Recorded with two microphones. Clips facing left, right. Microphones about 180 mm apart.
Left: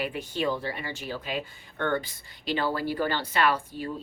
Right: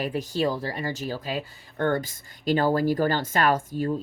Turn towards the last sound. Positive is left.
turn(degrees=-45)  # may be behind; listen again after turning